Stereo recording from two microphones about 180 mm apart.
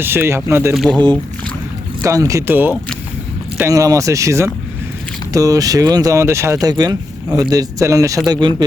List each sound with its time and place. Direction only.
0.0 s speech: 10° right (ahead or behind)
0.7 s speech: centre (ahead or behind)
2.0 s speech: 20° right (ahead or behind)